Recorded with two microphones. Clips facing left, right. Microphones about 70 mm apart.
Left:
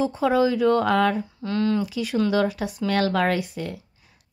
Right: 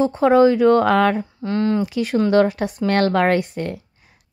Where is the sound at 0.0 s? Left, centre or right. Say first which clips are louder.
Right 7 dB; right.